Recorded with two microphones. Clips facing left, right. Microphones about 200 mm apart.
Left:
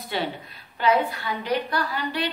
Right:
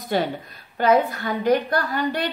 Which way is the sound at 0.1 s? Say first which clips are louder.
Right 5 dB; 45° right (ahead or behind).